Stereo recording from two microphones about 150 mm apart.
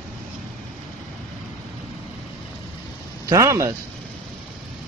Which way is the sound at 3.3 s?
20° right (ahead or behind).